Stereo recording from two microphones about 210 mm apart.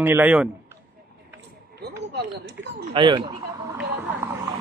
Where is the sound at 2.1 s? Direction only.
55° right (ahead or behind).